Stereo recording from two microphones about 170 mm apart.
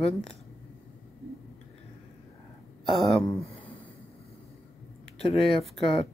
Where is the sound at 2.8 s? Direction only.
Centre (ahead or behind).